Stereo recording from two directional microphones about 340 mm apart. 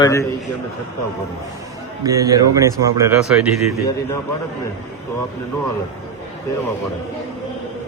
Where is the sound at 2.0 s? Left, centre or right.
Centre.